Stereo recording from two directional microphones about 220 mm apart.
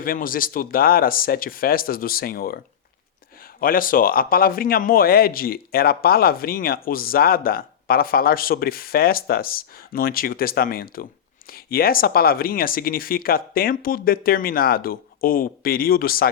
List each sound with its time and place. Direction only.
0.0 s a man's voice: 40° left (ahead or behind)